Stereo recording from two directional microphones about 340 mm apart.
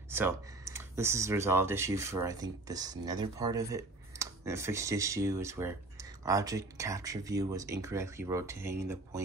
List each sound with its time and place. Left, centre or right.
0.1 s speech: centre